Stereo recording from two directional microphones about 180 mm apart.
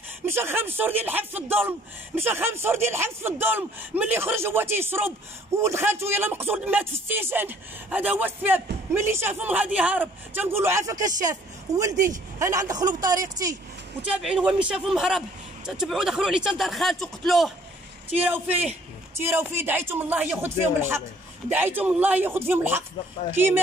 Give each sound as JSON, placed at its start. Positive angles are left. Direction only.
{"t": 0.2, "sound": "speech", "side_deg": -10}
{"t": 14.0, "sound": "a man's voice", "side_deg": -5}